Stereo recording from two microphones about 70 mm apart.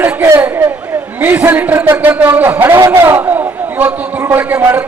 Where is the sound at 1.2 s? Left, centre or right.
Right.